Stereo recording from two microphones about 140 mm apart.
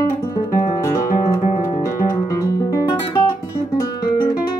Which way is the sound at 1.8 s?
25° left (ahead or behind).